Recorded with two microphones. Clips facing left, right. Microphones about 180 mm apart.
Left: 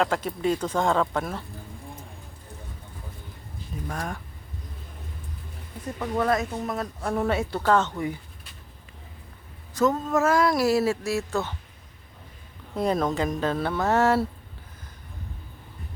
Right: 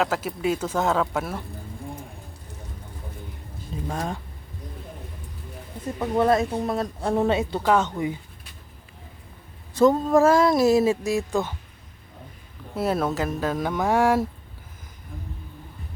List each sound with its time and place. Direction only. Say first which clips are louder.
0.0 s speech: even; 5° right (ahead or behind)
3.8 s speech: right 4 dB; 25° right (ahead or behind)
6.0 s speech: right 4 dB; 25° right (ahead or behind)
9.7 s speech: right 5 dB; 30° right (ahead or behind); by 11.5 s 15° right (ahead or behind)
12.7 s speech: even; 5° right (ahead or behind)